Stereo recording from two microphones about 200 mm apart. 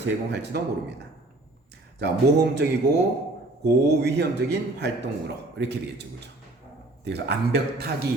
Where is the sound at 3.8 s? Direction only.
55° right (ahead or behind).